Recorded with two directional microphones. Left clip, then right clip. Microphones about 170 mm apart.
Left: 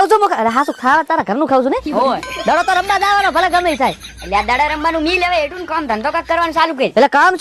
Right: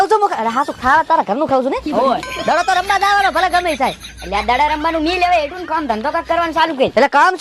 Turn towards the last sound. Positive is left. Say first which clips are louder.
# left 1 dB
turn(degrees=50)  # may be behind; listen again after turning